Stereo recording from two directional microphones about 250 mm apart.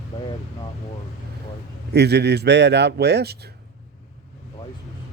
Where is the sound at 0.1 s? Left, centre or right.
Centre.